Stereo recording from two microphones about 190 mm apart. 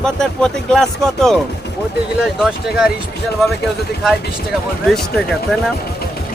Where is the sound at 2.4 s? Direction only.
5° right (ahead or behind).